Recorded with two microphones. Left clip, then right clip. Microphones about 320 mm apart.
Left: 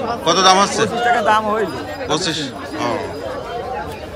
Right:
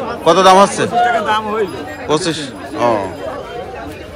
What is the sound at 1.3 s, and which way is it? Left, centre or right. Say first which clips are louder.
Speech: left 1 dB; centre.